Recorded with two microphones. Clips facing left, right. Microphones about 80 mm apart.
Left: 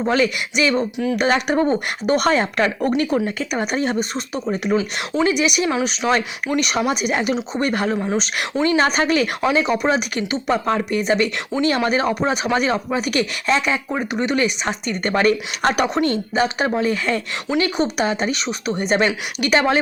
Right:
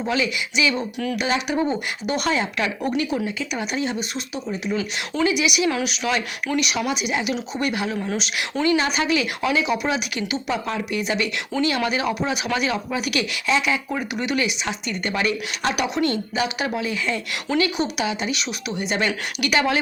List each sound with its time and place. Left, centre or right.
0.0 s speech: left
7.3 s speech: left
7.7 s speech: left
7.9 s speech: left